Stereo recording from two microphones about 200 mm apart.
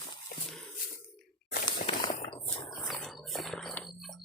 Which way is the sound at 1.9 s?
30° left (ahead or behind).